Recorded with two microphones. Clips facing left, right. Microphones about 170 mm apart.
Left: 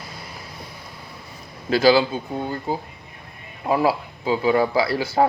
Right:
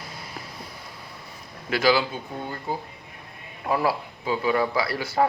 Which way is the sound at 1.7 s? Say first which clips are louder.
Left 5 dB; 30° left (ahead or behind).